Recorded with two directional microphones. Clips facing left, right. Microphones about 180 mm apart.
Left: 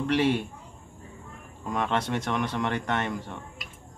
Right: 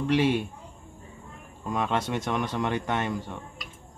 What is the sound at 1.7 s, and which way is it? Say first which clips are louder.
Speech: even; 5° right (ahead or behind).